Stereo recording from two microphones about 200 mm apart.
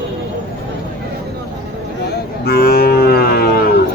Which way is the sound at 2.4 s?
50° left (ahead or behind).